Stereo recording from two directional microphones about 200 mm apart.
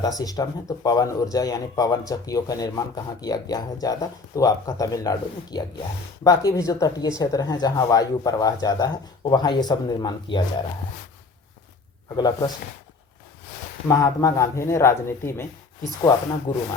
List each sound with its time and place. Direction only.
0.0 s a man's voice: 20° left (ahead or behind)
12.0 s speech: 20° left (ahead or behind)
13.8 s a man's voice: 15° left (ahead or behind)
16.5 s speech: 20° left (ahead or behind)